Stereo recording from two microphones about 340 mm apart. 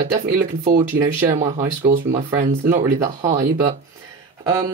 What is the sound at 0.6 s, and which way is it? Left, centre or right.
Speech, right.